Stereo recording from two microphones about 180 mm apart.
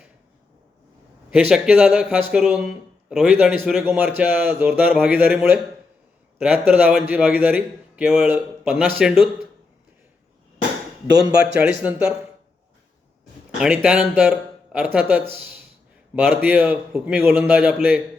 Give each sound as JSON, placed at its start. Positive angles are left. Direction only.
{"t": 1.3, "sound": "a man's voice", "side_deg": -5}
{"t": 11.1, "sound": "speech", "side_deg": -20}
{"t": 11.8, "sound": "a man's voice", "side_deg": -5}
{"t": 13.6, "sound": "a man's voice", "side_deg": -5}